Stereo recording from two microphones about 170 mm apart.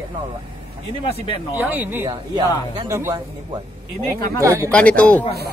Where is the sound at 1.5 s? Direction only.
10° right (ahead or behind).